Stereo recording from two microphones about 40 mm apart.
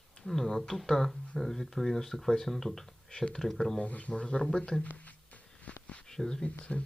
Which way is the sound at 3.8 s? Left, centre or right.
Left.